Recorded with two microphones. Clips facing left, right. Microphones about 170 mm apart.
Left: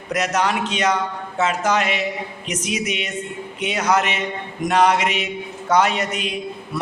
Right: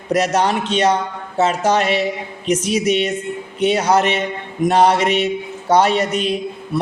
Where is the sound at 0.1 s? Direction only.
30° right (ahead or behind).